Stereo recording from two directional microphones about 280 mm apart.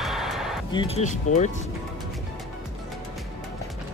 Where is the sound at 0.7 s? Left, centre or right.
Centre.